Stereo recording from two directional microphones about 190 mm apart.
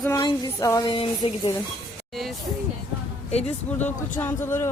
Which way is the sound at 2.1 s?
Centre (ahead or behind).